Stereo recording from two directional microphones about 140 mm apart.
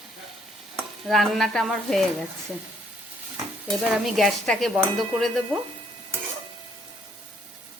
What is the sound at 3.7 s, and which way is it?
Dishes, centre (ahead or behind).